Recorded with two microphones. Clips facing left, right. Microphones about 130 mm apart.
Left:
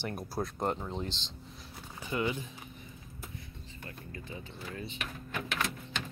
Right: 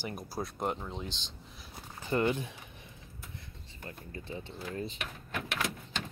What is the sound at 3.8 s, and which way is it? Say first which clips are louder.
Speech: right 2 dB; 30° right (ahead or behind).